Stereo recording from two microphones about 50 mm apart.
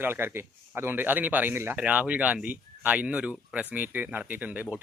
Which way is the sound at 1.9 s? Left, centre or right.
Right.